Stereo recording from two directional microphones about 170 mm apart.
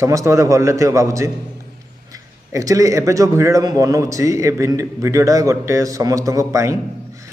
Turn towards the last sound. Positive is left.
turn(degrees=-15)  # may be behind; listen again after turning